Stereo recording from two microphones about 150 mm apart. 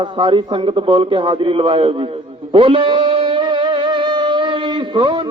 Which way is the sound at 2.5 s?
35° right (ahead or behind).